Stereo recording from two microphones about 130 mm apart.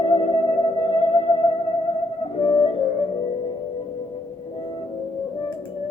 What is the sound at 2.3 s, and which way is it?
Music, 40° left (ahead or behind).